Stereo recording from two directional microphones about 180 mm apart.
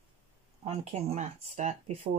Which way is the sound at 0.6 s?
35° right (ahead or behind).